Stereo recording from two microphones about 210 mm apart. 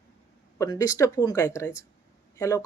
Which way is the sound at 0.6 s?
15° left (ahead or behind).